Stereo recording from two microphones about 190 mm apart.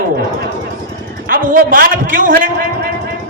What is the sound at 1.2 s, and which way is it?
A man's voice, 45° right (ahead or behind).